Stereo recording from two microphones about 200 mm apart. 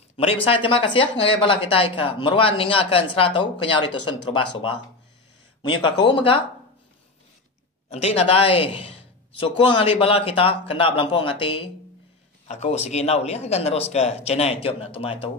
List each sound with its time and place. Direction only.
0.2 s speech: 30° left (ahead or behind)
7.9 s a man's voice: 30° left (ahead or behind)